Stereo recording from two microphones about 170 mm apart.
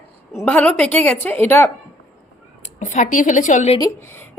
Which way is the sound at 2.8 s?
50° left (ahead or behind).